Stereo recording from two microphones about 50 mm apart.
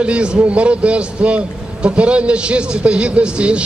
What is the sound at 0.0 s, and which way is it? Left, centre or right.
A man's voice, right.